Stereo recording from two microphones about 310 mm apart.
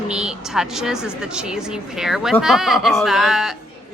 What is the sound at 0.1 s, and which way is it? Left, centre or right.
Speech, centre.